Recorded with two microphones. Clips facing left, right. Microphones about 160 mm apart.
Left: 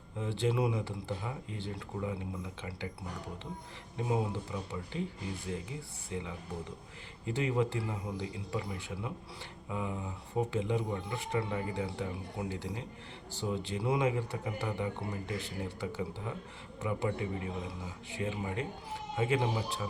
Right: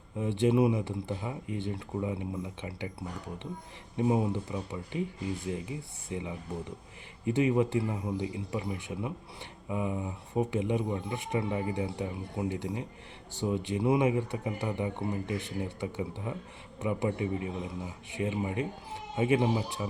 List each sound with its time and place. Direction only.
0.2 s speech: 20° right (ahead or behind)
3.9 s speech: 20° right (ahead or behind)